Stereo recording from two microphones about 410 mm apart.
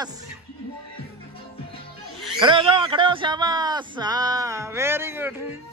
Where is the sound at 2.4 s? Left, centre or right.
Centre.